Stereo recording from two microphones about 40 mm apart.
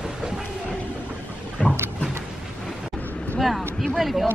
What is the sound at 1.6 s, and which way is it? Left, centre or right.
Vehicle, left.